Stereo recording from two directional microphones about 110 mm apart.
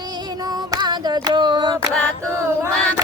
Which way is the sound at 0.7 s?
40° right (ahead or behind).